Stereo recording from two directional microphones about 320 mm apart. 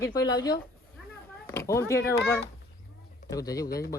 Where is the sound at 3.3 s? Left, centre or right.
Centre.